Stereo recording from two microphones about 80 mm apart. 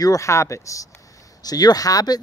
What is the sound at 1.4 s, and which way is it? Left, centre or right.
Speech, left.